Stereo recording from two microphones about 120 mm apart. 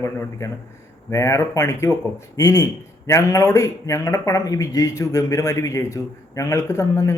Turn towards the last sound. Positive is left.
turn(degrees=25)  # may be behind; listen again after turning